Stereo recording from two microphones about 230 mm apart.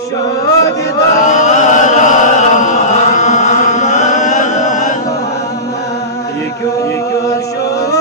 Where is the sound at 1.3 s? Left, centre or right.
Left.